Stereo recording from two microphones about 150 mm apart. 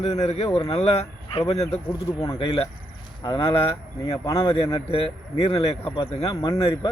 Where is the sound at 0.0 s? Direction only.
45° left (ahead or behind).